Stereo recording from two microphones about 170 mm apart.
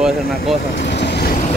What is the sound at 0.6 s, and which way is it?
Vehicle, 90° left.